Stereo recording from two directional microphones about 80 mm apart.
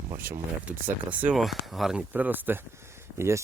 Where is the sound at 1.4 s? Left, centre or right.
Centre.